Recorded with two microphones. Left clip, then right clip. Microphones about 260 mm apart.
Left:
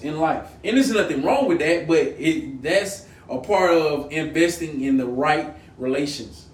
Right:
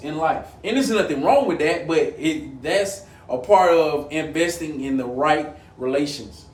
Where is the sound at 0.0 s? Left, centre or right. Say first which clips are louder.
Even; centre.